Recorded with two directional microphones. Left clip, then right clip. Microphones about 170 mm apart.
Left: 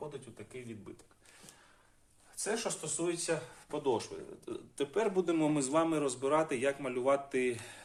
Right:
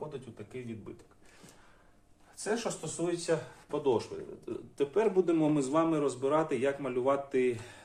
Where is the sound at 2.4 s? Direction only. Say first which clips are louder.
Right 2 dB; 25° left (ahead or behind).